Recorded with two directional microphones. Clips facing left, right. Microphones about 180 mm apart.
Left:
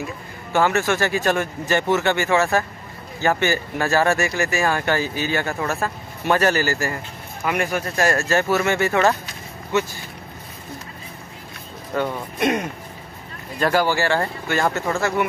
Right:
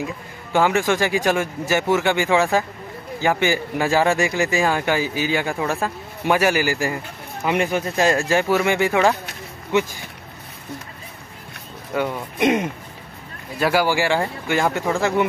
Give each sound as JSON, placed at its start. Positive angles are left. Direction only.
{"t": 0.5, "sound": "speech", "side_deg": -15}
{"t": 11.9, "sound": "speech", "side_deg": -10}
{"t": 13.6, "sound": "speech", "side_deg": -10}